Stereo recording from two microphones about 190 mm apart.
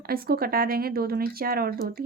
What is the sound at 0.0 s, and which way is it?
A woman's voice, 50° right (ahead or behind).